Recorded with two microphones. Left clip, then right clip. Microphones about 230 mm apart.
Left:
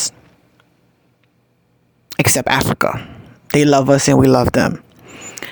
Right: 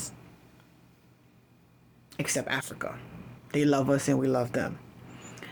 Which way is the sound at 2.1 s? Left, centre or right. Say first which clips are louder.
Left 15 dB; left.